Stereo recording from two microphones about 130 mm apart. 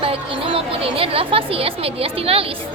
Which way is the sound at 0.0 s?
45° right (ahead or behind).